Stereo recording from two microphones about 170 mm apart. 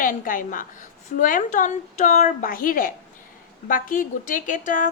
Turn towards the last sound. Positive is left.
turn(degrees=50)  # may be behind; listen again after turning